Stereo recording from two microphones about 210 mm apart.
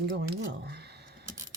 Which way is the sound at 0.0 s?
50° right (ahead or behind).